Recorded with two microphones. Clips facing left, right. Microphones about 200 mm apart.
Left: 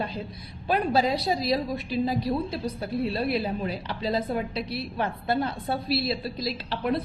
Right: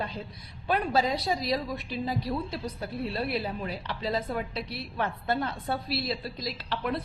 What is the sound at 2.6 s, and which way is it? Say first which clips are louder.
A woman's voice: left 5 dB; 35° left (ahead or behind).